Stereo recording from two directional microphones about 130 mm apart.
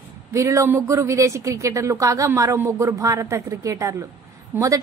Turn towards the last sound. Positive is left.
turn(degrees=-25)  # may be behind; listen again after turning